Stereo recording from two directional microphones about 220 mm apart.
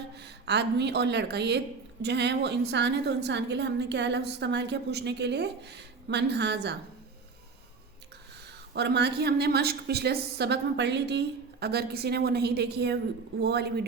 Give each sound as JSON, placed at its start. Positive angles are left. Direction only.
{"t": 0.2, "sound": "speech", "side_deg": -50}
{"t": 8.7, "sound": "speech", "side_deg": -50}